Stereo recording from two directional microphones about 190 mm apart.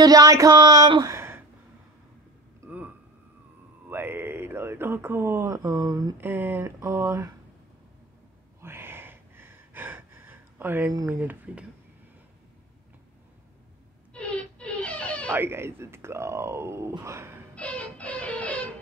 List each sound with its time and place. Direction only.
0.0 s speech: 20° right (ahead or behind)
1.1 s gasp: 15° right (ahead or behind)
2.6 s a sound: 15° right (ahead or behind)
3.9 s speech: 10° right (ahead or behind)
8.5 s a sound: 10° right (ahead or behind)
14.1 s wail: 5° left (ahead or behind)
15.3 s speech: 10° right (ahead or behind)
17.6 s music: 5° left (ahead or behind)